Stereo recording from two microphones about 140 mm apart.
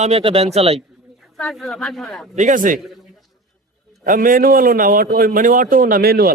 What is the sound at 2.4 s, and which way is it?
Speech, 65° right (ahead or behind).